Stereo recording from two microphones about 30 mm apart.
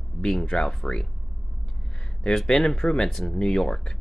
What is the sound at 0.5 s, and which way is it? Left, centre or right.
Speech, left.